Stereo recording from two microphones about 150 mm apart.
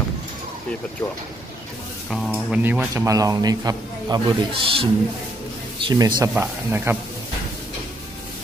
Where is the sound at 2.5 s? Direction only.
10° right (ahead or behind).